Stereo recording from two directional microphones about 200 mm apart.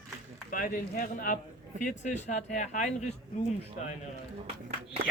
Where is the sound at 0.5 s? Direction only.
45° left (ahead or behind).